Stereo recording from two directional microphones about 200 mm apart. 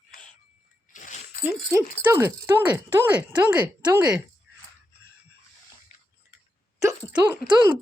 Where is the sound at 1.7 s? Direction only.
15° right (ahead or behind).